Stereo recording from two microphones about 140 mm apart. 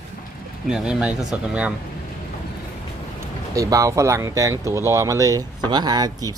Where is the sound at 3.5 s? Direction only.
25° right (ahead or behind).